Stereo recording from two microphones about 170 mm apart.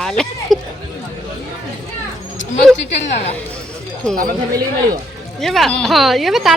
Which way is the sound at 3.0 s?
40° left (ahead or behind).